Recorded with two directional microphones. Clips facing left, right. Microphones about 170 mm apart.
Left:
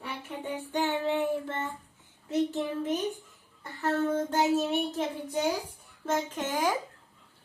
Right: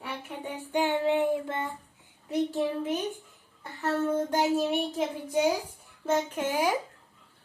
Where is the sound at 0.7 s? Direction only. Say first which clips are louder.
Right 3 dB; 15° right (ahead or behind).